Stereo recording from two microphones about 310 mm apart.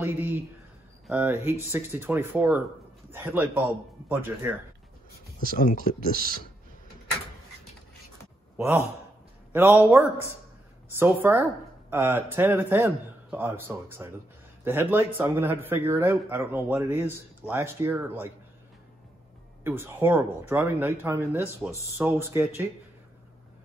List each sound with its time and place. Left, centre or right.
0.0 s a sound: centre
1.0 s speech: centre
5.6 s speech: left
5.9 s speech: right
8.5 s speech: centre
19.6 s speech: centre